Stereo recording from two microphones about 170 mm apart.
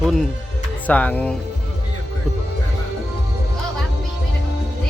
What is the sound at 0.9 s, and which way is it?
Speech, 10° left (ahead or behind).